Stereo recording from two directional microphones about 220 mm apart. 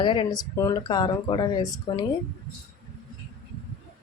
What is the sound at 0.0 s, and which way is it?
Speech, 20° left (ahead or behind).